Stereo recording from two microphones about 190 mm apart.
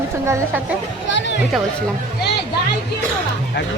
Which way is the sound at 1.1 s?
70° left (ahead or behind).